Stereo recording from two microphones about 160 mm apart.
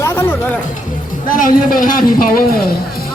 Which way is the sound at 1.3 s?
60° left (ahead or behind).